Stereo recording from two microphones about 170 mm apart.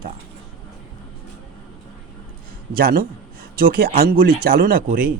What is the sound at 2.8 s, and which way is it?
Speech, 60° right (ahead or behind).